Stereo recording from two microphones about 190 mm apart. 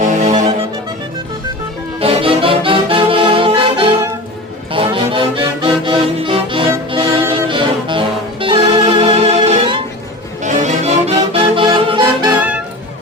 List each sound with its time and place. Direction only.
0.0 s music: 40° right (ahead or behind)
2.0 s music: 30° right (ahead or behind)
12.3 s music: 5° right (ahead or behind)